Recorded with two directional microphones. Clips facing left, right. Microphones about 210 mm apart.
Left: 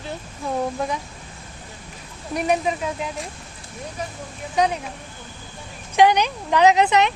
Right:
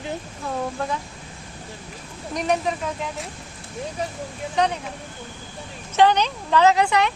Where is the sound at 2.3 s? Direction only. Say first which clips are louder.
Left 2 dB; 5° left (ahead or behind).